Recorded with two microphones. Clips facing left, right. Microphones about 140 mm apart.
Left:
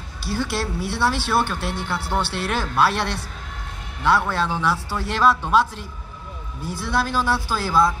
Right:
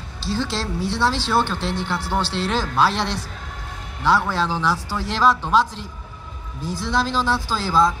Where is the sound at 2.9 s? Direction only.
55° left (ahead or behind).